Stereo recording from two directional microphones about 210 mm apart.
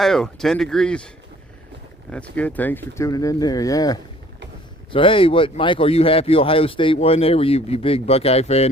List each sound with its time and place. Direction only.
0.0 s speech: centre (ahead or behind); by 8.7 s 30° left (ahead or behind)